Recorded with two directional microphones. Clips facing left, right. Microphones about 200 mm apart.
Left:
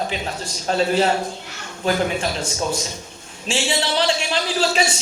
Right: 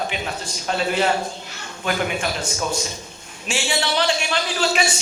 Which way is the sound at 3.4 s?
30° left (ahead or behind).